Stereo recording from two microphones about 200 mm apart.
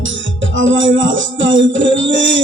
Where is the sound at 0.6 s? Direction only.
70° right (ahead or behind).